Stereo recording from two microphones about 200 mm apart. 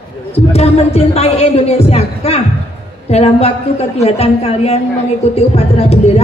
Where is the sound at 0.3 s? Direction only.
30° left (ahead or behind).